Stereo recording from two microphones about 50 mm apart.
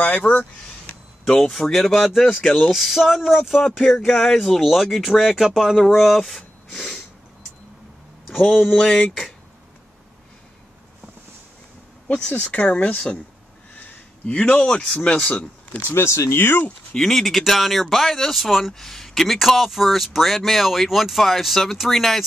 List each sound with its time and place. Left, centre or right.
0.0 s speech: left
1.2 s speech: centre
2.4 s speech: left
2.7 s speech: centre
8.3 s a man's voice: centre
12.1 s speech: centre
13.7 s a sound: left
15.9 s speech: left
16.9 s speech: centre